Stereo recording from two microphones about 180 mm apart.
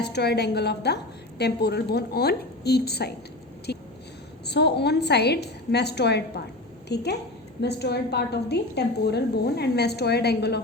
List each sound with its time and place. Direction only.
0.0 s a woman's voice: 65° left (ahead or behind)